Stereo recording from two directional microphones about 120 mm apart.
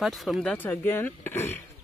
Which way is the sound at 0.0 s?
Centre (ahead or behind).